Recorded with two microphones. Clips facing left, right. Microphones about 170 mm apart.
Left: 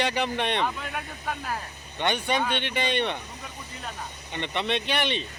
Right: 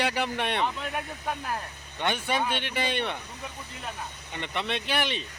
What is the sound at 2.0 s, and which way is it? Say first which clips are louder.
Speech: left 2 dB; 5° right (ahead or behind).